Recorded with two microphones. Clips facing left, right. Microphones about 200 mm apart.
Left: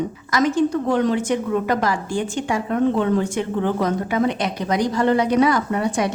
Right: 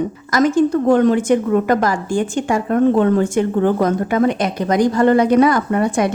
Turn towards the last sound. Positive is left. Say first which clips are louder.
# right 4 dB
turn(degrees=-50)  # may be behind; listen again after turning